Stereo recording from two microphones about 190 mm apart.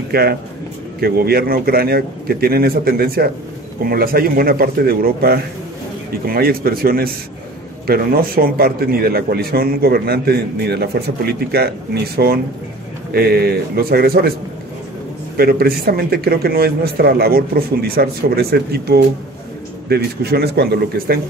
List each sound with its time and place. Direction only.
0.1 s a man's voice: 55° right (ahead or behind)
15.3 s a man's voice: 55° right (ahead or behind)